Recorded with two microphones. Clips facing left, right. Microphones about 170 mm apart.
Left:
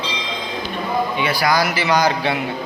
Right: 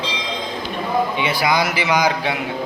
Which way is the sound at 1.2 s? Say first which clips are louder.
Left 1 dB; 20° right (ahead or behind).